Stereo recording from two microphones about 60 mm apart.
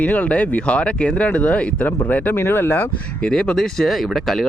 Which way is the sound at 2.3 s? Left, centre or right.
Left.